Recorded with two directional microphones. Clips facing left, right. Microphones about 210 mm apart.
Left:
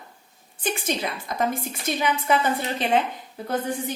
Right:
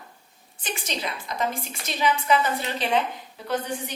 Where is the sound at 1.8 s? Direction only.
50° left (ahead or behind).